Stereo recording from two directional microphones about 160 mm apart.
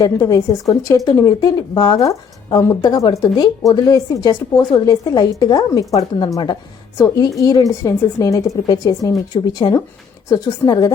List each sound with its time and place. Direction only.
0.0 s a woman's voice: 20° left (ahead or behind)